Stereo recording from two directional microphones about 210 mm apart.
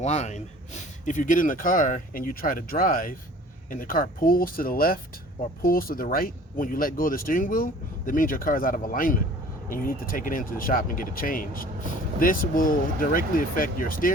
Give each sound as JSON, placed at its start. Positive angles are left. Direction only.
{"t": 0.0, "sound": "speech", "side_deg": 35}